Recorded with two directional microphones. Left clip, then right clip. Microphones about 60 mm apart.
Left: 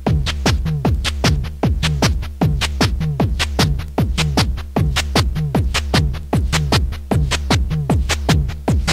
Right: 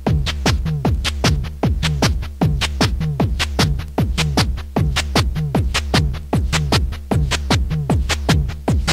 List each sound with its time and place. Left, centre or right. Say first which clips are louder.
0.0 s music: left 1 dB; left